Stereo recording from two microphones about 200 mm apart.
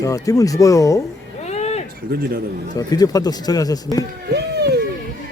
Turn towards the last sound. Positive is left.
turn(degrees=-55)  # may be behind; listen again after turning